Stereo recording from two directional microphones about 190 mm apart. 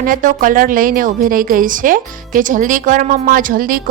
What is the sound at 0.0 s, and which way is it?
A woman's voice, 45° right (ahead or behind).